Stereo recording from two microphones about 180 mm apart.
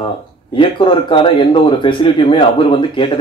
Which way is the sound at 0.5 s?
25° left (ahead or behind).